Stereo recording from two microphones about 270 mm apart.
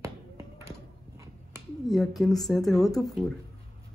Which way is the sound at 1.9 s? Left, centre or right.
Centre.